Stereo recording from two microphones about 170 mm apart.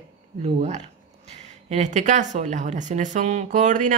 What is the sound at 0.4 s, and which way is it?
Speech, 40° right (ahead or behind).